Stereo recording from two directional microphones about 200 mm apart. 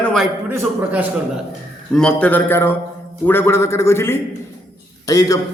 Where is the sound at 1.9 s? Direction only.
5° left (ahead or behind).